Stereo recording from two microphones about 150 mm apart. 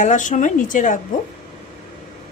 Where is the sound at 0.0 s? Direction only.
55° left (ahead or behind).